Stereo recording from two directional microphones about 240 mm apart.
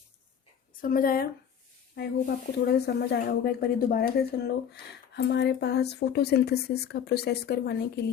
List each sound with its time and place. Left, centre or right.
0.8 s speech: left